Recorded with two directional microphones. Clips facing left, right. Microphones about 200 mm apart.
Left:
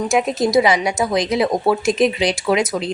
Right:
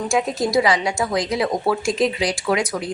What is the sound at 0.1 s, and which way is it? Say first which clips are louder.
A woman's voice: left 3 dB; 20° left (ahead or behind).